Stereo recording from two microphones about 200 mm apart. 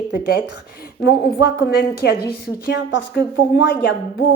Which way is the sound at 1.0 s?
50° left (ahead or behind).